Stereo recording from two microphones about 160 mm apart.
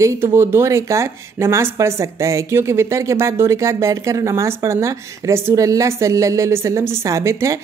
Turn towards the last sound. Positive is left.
turn(degrees=-20)  # may be behind; listen again after turning